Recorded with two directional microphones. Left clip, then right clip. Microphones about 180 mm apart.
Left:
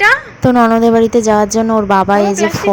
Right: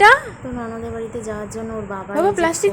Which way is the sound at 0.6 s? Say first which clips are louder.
Left 18 dB; 50° left (ahead or behind).